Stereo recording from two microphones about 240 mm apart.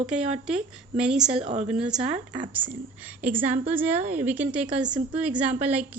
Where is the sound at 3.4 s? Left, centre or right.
Centre.